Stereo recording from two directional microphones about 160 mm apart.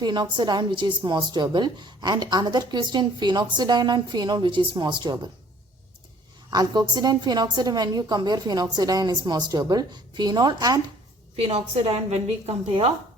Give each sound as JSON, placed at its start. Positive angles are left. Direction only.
{"t": 0.0, "sound": "a woman's voice", "side_deg": -30}
{"t": 6.5, "sound": "a woman's voice", "side_deg": -25}
{"t": 11.3, "sound": "a woman's voice", "side_deg": -40}